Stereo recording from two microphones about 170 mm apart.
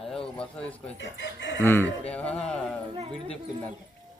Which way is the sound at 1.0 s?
90° left.